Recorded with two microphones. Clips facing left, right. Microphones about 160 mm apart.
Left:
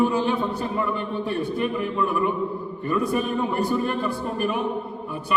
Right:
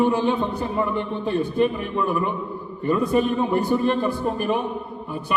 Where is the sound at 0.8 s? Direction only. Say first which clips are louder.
Right 4 dB; 25° right (ahead or behind).